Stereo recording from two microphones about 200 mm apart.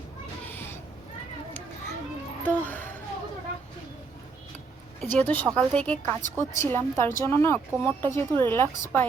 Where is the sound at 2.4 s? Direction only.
10° left (ahead or behind).